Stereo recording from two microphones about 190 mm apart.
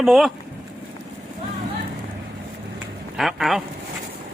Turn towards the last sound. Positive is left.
turn(degrees=0)  # may be behind; listen again after turning